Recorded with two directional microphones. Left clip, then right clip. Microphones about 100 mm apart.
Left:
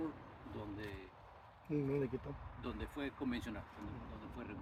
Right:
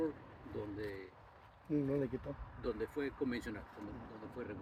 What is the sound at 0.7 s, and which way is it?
Speech, 30° left (ahead or behind).